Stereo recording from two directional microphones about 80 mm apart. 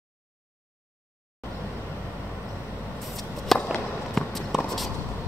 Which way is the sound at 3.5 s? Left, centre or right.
Centre.